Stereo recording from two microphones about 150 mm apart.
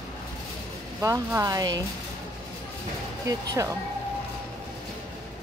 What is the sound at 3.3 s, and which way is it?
Speech, 20° right (ahead or behind).